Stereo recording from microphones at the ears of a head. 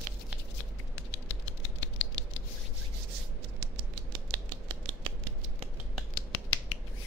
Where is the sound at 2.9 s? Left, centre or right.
Right.